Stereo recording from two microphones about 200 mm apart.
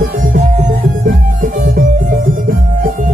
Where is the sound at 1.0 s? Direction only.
45° right (ahead or behind).